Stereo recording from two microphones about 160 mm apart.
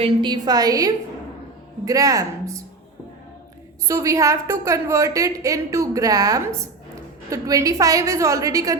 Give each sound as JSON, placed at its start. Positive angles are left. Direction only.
{"t": 0.0, "sound": "a woman's voice", "side_deg": -30}
{"t": 3.8, "sound": "a woman's voice", "side_deg": -20}